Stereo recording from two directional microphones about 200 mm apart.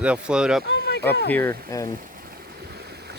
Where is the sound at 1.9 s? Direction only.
45° right (ahead or behind).